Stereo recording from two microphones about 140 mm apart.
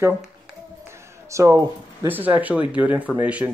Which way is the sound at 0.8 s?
20° right (ahead or behind).